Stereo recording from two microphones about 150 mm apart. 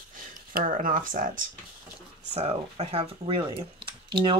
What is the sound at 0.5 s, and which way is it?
Speech, 65° right (ahead or behind).